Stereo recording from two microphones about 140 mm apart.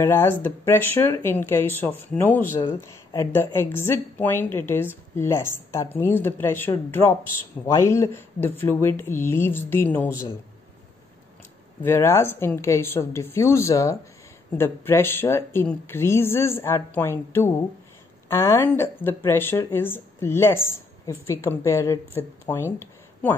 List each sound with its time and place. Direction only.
0.0 s a woman's voice: 15° left (ahead or behind)
11.8 s a woman's voice: 15° left (ahead or behind)